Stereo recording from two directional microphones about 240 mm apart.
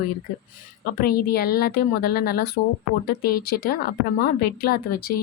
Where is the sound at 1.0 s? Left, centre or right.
Left.